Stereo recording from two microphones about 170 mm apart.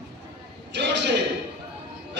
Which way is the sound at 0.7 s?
90° right.